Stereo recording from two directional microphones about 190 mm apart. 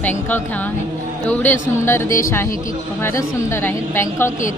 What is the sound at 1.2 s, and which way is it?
A woman's voice, 10° left (ahead or behind).